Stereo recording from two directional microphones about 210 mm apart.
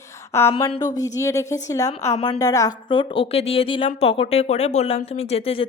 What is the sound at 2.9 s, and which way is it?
Speech, 25° left (ahead or behind).